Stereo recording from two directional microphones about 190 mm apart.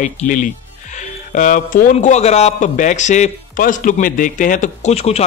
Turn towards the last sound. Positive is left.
turn(degrees=35)  # may be behind; listen again after turning